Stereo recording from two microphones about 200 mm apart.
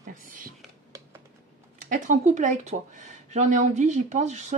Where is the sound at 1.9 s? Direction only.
40° right (ahead or behind).